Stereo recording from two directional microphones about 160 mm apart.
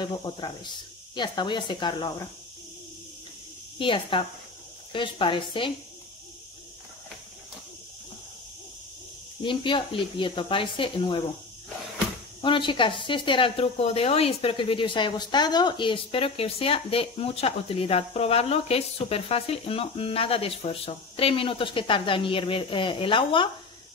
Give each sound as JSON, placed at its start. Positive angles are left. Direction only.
{"t": 0.0, "sound": "speech", "side_deg": 30}
{"t": 3.7, "sound": "speech", "side_deg": 30}
{"t": 9.4, "sound": "speech", "side_deg": 30}
{"t": 12.4, "sound": "speech", "side_deg": 30}